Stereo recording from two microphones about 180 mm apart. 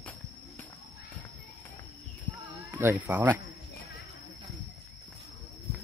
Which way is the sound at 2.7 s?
20° right (ahead or behind).